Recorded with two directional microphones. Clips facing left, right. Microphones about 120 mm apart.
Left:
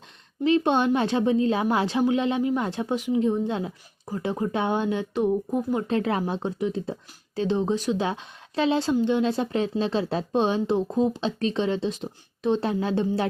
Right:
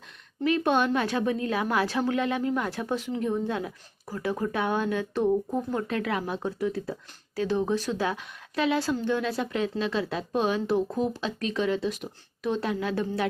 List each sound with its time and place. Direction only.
0.4 s speech: 25° left (ahead or behind)
5.9 s speech: 30° left (ahead or behind)